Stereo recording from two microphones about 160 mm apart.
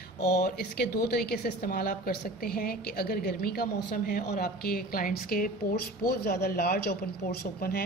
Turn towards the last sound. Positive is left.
turn(degrees=65)  # may be behind; listen again after turning